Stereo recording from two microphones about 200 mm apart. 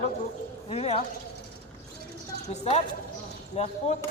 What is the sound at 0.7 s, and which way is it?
Speech, 30° left (ahead or behind).